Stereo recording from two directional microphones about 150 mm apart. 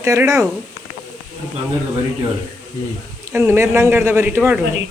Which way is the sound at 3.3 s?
15° right (ahead or behind).